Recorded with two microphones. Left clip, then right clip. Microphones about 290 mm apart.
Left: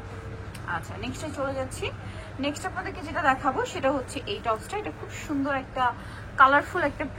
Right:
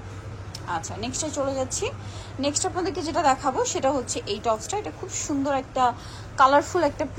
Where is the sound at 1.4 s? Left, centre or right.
Centre.